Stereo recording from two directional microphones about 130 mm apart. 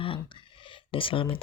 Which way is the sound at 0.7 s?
40° left (ahead or behind).